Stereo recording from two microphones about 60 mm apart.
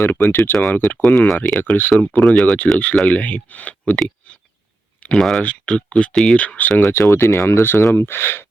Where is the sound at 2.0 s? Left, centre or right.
Centre.